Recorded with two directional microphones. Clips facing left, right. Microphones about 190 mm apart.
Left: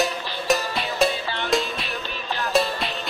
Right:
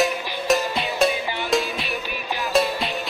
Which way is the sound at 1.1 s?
15° right (ahead or behind).